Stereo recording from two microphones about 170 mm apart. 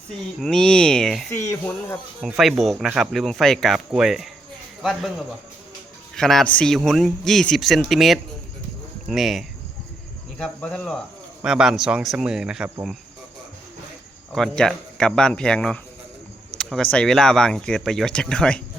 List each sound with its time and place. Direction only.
0.3 s speech: 5° left (ahead or behind)
1.3 s speech: 15° left (ahead or behind)
2.2 s speech: 5° right (ahead or behind)
6.1 s speech: 5° left (ahead or behind)
14.3 s speech: 5° left (ahead or behind)